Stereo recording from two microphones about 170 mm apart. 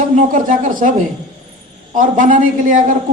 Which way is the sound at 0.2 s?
50° right (ahead or behind).